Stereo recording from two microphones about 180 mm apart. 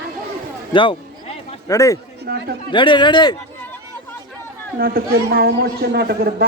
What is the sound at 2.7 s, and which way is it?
Speech, 25° left (ahead or behind).